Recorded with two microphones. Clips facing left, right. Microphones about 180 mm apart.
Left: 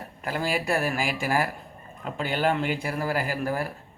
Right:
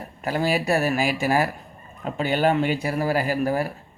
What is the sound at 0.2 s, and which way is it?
Speech, 20° right (ahead or behind).